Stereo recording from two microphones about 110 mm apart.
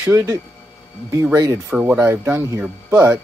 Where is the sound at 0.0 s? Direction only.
20° right (ahead or behind).